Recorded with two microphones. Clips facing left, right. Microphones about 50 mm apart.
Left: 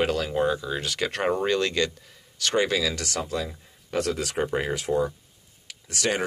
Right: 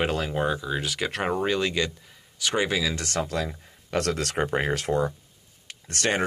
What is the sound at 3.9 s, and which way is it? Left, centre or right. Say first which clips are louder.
Speech: even; right.